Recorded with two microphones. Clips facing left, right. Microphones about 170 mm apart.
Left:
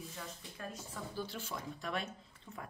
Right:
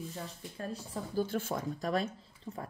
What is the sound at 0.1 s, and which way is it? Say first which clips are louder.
Speech: right 5 dB; 35° right (ahead or behind).